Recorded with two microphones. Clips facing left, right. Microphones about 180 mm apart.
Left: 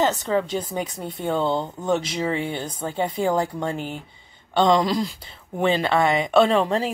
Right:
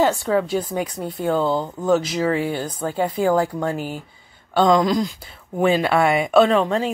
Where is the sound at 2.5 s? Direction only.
25° left (ahead or behind).